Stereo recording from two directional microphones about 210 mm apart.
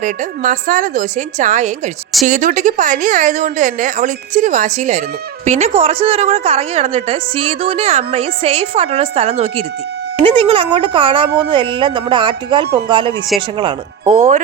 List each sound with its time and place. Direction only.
0.0 s a woman's voice: 40° right (ahead or behind)
14.1 s speech: 35° right (ahead or behind)